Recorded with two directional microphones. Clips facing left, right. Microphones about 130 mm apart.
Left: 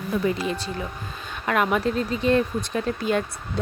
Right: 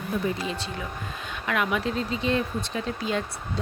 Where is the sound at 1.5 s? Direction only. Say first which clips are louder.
Left 4 dB; 45° left (ahead or behind).